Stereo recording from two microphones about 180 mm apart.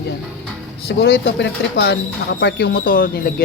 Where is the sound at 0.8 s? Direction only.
60° left (ahead or behind).